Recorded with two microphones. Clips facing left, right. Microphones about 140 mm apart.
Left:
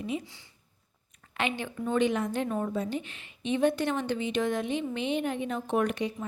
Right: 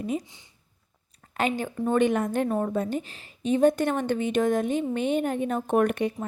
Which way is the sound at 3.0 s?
35° right (ahead or behind).